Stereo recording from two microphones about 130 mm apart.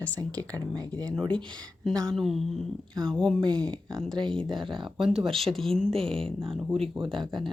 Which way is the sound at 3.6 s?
30° right (ahead or behind).